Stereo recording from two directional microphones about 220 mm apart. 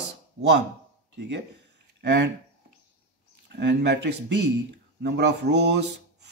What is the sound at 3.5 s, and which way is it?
Speech, 50° right (ahead or behind).